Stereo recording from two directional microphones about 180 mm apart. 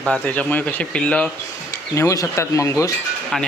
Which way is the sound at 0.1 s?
5° left (ahead or behind).